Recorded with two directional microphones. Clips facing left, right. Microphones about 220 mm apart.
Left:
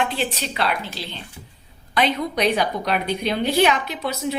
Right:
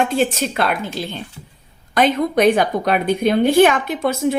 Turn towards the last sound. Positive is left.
turn(degrees=-50)  # may be behind; listen again after turning